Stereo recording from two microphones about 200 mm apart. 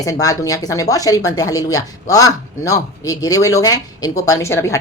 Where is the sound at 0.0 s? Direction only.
15° left (ahead or behind).